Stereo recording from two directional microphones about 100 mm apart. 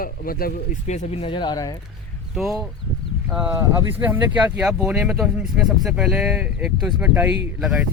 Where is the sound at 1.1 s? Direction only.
75° left (ahead or behind); by 1.6 s 55° left (ahead or behind).